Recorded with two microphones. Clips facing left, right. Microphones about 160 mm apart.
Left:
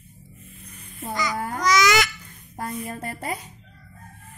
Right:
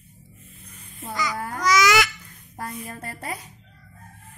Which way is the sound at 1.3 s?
25° left (ahead or behind).